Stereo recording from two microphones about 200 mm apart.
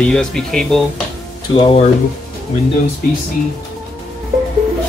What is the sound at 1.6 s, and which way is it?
Speech, 25° left (ahead or behind).